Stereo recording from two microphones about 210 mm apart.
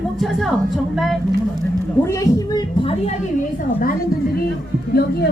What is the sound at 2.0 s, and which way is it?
Speech, 15° left (ahead or behind).